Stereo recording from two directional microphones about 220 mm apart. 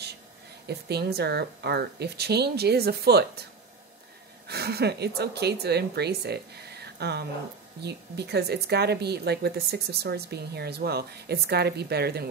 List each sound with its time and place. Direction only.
0.7 s a woman's voice: 50° right (ahead or behind)
4.5 s a woman's voice: 45° right (ahead or behind)